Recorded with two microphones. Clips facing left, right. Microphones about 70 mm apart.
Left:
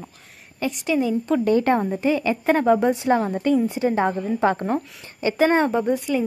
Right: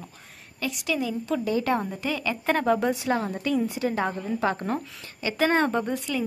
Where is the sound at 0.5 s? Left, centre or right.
Left.